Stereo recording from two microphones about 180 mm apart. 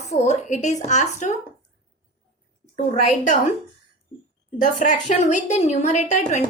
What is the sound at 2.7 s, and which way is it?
Speech, 40° left (ahead or behind).